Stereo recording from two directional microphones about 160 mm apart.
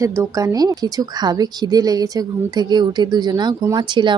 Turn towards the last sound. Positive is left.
turn(degrees=-30)  # may be behind; listen again after turning